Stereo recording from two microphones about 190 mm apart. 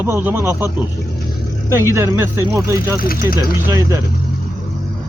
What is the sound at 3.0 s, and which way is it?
Speech, 50° left (ahead or behind).